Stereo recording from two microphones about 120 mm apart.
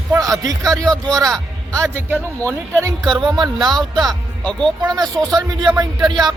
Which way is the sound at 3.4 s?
35° right (ahead or behind).